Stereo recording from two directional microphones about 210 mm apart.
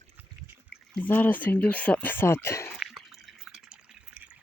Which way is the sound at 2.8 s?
Centre (ahead or behind).